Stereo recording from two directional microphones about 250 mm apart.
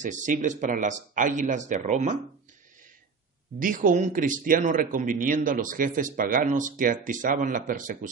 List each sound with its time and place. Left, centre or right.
0.0 s speech: right
3.5 s a man's voice: right